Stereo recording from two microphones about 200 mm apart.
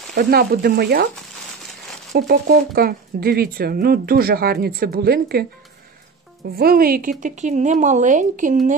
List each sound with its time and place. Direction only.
0.1 s speech: 50° right (ahead or behind)
2.1 s speech: 45° right (ahead or behind)
6.5 s speech: 50° right (ahead or behind)